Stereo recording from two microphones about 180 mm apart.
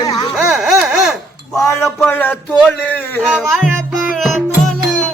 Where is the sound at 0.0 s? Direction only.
20° left (ahead or behind).